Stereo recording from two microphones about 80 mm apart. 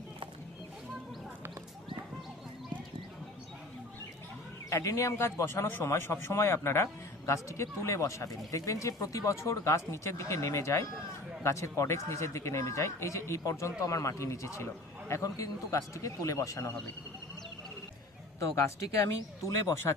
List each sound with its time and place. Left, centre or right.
4.7 s speech: left
18.3 s speech: left